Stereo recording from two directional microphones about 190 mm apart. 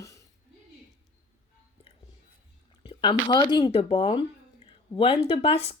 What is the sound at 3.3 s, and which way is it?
Speech, 25° left (ahead or behind).